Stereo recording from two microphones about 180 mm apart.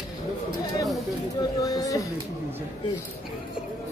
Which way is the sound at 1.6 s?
20° left (ahead or behind).